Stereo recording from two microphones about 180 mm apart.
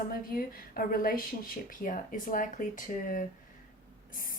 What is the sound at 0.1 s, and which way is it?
Speech, 55° left (ahead or behind).